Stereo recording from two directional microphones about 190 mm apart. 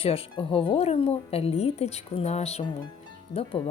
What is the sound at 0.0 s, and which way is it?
A woman's voice, 30° left (ahead or behind).